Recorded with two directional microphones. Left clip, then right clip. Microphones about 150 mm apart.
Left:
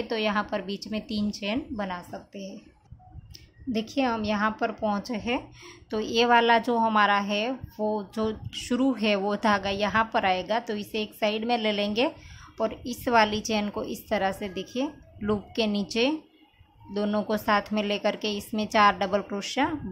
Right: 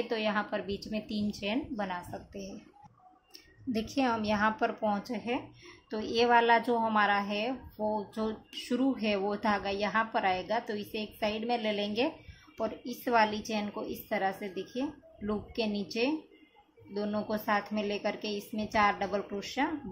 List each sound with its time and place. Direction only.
0.0 s speech: 25° left (ahead or behind)
3.7 s a woman's voice: 20° left (ahead or behind); by 19.7 s 40° left (ahead or behind)